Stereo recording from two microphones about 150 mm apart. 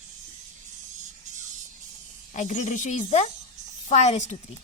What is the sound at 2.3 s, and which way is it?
A woman's voice, 55° left (ahead or behind).